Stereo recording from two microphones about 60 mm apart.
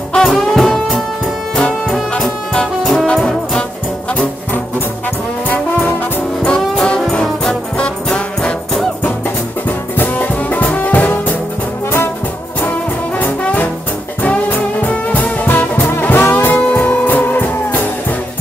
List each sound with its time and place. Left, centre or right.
0.1 s music: centre
2.1 s brass instrument: centre
2.8 s brass instrument: centre
6.4 s brass instrument: centre
9.7 s music: left
12.5 s brass instrument: left
14.9 s brass instrument: left
16.7 s music: left